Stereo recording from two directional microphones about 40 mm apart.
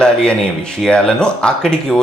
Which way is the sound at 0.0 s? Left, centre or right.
Left.